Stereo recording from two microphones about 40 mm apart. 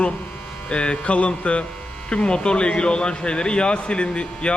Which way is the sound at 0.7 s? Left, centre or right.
Left.